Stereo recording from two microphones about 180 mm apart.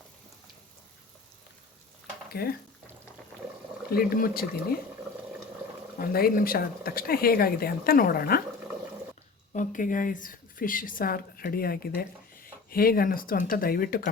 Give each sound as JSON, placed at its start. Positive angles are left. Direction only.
{"t": 2.3, "sound": "speech", "side_deg": 60}
{"t": 3.9, "sound": "speech", "side_deg": 55}
{"t": 6.0, "sound": "speech", "side_deg": 55}
{"t": 9.5, "sound": "speech", "side_deg": 45}